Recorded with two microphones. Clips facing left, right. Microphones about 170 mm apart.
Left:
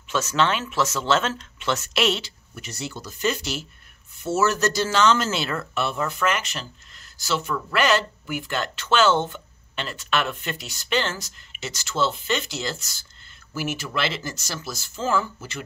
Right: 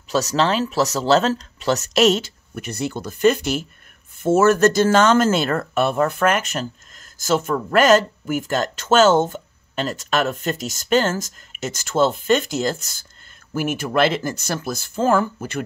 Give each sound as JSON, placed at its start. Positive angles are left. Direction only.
{"t": 0.1, "sound": "speech", "side_deg": -35}